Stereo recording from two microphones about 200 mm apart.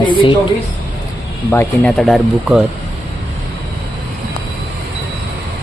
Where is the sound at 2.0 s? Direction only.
Centre (ahead or behind).